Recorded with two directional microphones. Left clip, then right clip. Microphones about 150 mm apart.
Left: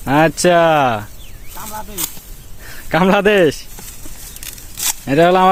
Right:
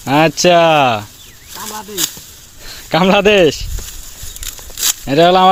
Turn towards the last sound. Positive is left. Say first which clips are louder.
# right 2 dB
turn(degrees=15)  # may be behind; listen again after turning